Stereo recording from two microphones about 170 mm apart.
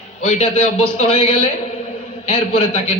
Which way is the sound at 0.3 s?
40° left (ahead or behind).